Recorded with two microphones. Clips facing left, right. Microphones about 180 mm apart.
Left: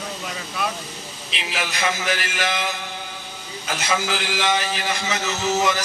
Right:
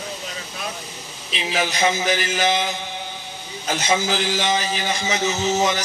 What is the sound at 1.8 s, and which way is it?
Speech, 25° right (ahead or behind).